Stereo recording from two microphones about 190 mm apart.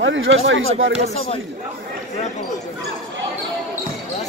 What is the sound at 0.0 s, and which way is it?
Speech, 85° right.